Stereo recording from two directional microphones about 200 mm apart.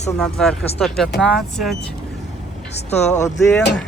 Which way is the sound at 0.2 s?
5° left (ahead or behind).